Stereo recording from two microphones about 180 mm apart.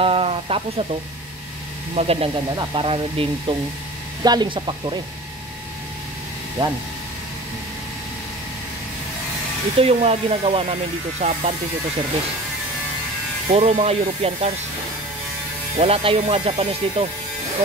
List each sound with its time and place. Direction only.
0.0 s speech: 30° right (ahead or behind)
2.0 s speech: 35° right (ahead or behind)
6.6 s speech: 25° right (ahead or behind)
9.8 s speech: 35° right (ahead or behind)
13.5 s speech: 35° right (ahead or behind)
15.8 s speech: 30° right (ahead or behind)